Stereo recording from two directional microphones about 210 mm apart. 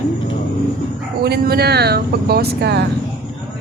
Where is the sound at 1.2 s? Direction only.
50° right (ahead or behind).